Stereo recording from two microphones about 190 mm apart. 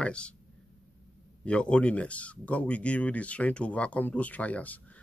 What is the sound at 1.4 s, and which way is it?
Speech, 5° left (ahead or behind).